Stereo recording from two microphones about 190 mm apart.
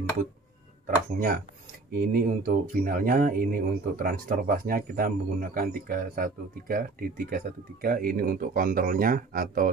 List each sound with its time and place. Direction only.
0.8 s speech: 50° right (ahead or behind)